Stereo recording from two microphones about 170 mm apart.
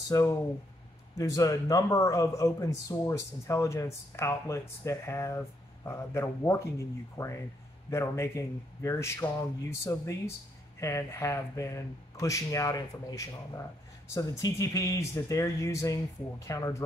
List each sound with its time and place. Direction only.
0.1 s speech: 20° left (ahead or behind)